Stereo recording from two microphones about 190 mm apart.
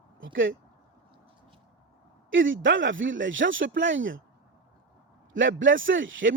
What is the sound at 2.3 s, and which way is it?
Speech, 90° right.